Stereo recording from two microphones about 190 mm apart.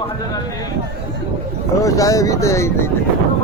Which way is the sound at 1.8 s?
15° left (ahead or behind).